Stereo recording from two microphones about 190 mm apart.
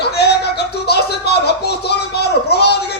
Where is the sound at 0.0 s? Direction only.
60° left (ahead or behind).